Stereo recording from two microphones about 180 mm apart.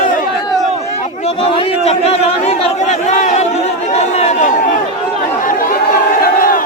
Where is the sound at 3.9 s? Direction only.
35° left (ahead or behind).